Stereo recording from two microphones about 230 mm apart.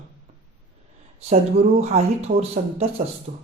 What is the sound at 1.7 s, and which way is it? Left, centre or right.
Speech, right.